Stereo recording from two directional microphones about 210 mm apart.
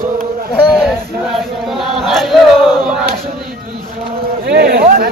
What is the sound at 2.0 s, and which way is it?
Battle cry, centre (ahead or behind).